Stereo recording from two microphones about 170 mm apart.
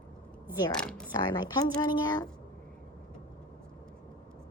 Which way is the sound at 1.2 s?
25° left (ahead or behind).